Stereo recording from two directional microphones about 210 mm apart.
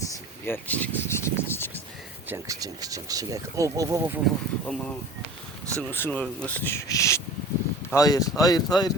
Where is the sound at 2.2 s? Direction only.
15° right (ahead or behind).